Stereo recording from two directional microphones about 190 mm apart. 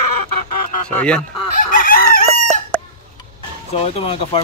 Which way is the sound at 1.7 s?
50° left (ahead or behind).